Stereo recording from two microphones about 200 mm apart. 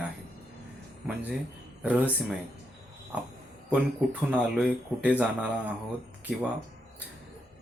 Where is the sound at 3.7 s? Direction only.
5° right (ahead or behind).